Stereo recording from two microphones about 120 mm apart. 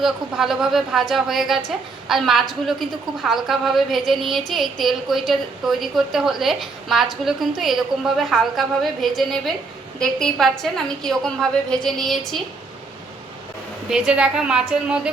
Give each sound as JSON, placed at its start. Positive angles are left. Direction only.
{"t": 0.0, "sound": "a woman's voice", "side_deg": -5}
{"t": 13.9, "sound": "a woman's voice", "side_deg": -5}